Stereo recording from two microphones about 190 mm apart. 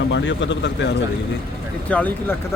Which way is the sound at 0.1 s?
75° left (ahead or behind).